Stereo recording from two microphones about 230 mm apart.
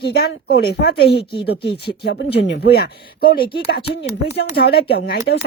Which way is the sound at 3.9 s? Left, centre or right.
Left.